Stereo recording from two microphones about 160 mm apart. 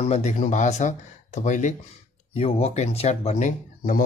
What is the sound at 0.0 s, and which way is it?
Speech, 45° left (ahead or behind).